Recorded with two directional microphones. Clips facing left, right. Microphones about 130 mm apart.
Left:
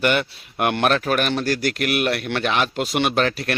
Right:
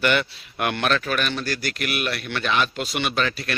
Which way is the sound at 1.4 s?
75° left (ahead or behind).